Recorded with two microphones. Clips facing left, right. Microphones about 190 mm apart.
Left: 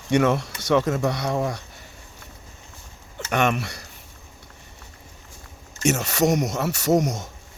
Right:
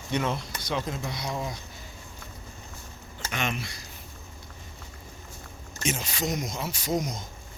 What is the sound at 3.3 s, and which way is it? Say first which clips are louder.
Speech: left 10 dB; 65° left (ahead or behind).